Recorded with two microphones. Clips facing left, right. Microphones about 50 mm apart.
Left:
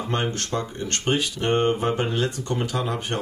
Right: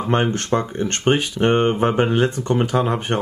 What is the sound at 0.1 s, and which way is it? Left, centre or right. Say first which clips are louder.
Speech: right 8 dB; right.